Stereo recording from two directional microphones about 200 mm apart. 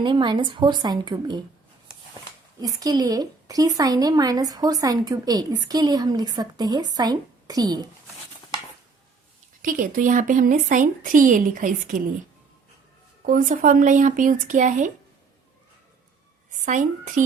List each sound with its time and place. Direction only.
0.0 s a woman's voice: 25° right (ahead or behind)
2.6 s a woman's voice: 20° right (ahead or behind)
9.6 s a woman's voice: 40° right (ahead or behind)
13.2 s a woman's voice: 40° right (ahead or behind)
16.5 s a woman's voice: 40° right (ahead or behind)